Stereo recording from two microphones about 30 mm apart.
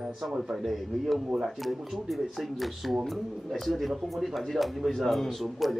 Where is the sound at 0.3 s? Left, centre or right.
Centre.